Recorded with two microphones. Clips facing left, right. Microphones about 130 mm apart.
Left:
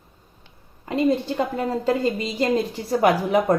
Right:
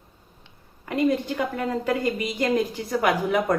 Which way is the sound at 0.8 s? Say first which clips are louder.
Left 2 dB; 25° left (ahead or behind).